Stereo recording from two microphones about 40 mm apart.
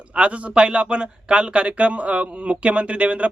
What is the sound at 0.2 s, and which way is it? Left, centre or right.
Speech, right.